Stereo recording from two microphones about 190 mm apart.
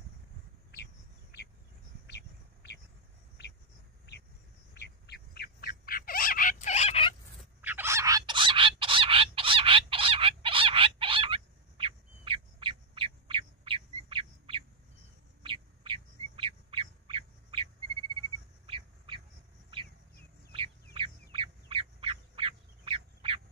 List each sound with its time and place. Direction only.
2.0 s a sound: 65° left (ahead or behind)
4.7 s bird: 60° left (ahead or behind); by 7.2 s 30° left (ahead or behind)
7.6 s fowl: 10° right (ahead or behind); by 14.6 s 30° right (ahead or behind)
15.4 s bird: 25° right (ahead or behind)
18.7 s bird: 25° right (ahead or behind)
20.9 s duck: 25° right (ahead or behind)